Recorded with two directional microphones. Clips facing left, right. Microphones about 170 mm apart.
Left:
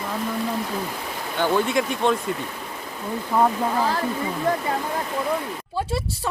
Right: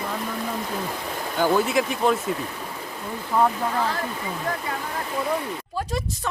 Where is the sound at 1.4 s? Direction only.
5° right (ahead or behind).